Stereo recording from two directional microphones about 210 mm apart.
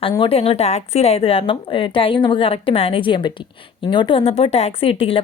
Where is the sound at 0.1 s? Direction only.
25° left (ahead or behind).